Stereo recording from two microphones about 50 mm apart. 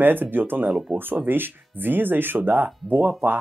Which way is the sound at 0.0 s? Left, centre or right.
Right.